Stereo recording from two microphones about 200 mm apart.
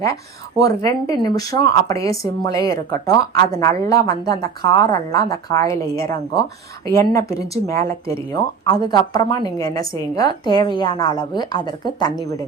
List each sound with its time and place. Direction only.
0.6 s a woman's voice: 15° left (ahead or behind)